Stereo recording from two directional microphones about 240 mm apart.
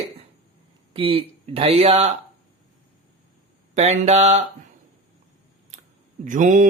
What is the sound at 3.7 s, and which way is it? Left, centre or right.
Speech, right.